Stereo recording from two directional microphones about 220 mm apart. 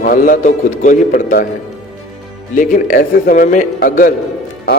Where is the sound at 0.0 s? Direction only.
40° left (ahead or behind).